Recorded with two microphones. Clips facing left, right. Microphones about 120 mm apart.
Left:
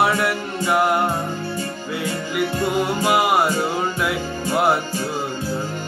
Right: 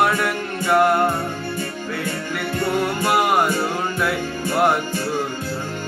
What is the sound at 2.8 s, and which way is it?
Music, 10° left (ahead or behind).